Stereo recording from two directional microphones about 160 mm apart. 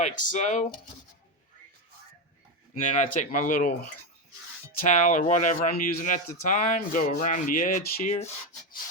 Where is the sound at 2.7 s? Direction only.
50° left (ahead or behind).